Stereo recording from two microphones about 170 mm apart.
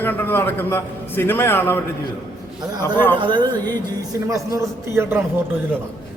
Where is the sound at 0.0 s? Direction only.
10° left (ahead or behind).